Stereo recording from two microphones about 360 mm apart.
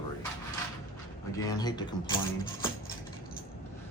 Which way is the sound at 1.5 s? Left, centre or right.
Centre.